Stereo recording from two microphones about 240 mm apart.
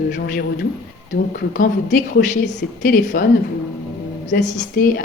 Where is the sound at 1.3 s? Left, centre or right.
Left.